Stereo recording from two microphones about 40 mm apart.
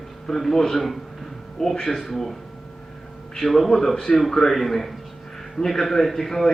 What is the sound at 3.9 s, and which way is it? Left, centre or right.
A man's voice, centre.